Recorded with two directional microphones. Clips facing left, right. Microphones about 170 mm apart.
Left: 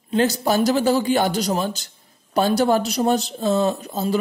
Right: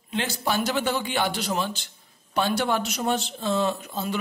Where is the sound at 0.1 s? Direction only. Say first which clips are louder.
Left 8 dB; 40° left (ahead or behind).